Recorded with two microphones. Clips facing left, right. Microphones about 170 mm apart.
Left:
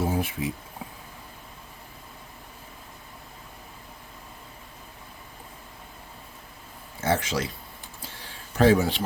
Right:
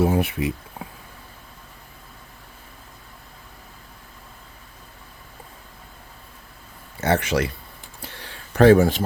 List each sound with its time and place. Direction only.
0.0 s speech: 70° right (ahead or behind)
7.0 s speech: 65° right (ahead or behind)
8.0 s a sound: 65° right (ahead or behind); by 9.0 s 50° right (ahead or behind)